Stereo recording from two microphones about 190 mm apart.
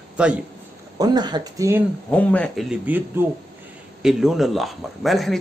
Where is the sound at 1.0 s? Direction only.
20° right (ahead or behind).